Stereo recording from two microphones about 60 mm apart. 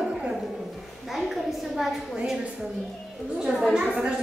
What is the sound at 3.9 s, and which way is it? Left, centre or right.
Speech, centre.